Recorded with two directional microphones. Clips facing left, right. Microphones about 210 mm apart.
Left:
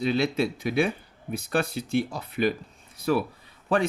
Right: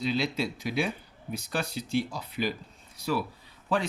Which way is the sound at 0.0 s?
55° left (ahead or behind).